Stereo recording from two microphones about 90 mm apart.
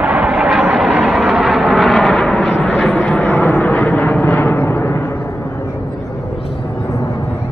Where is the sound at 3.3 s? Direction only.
25° left (ahead or behind).